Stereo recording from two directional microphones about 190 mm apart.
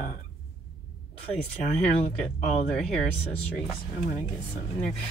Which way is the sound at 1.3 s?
5° left (ahead or behind).